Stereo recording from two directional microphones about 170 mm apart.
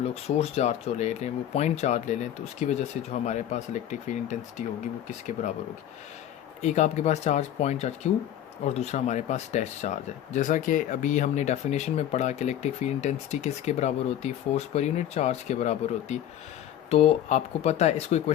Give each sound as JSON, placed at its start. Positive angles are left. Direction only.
{"t": 0.0, "sound": "speech", "side_deg": 35}
{"t": 6.6, "sound": "speech", "side_deg": 40}